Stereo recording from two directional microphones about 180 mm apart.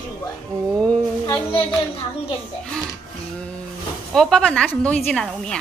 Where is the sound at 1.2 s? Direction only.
20° left (ahead or behind).